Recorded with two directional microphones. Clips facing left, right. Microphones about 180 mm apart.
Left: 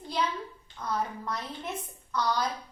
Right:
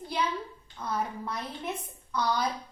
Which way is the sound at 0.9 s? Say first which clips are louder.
Even; 10° right (ahead or behind).